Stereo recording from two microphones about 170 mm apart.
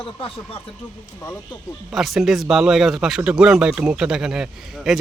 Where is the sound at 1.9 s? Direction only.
Centre (ahead or behind).